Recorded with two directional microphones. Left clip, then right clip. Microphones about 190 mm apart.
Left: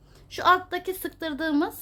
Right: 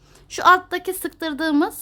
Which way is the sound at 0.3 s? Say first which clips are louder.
Right 6 dB; 30° right (ahead or behind).